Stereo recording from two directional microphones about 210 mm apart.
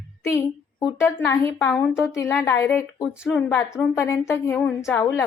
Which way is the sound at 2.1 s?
15° left (ahead or behind).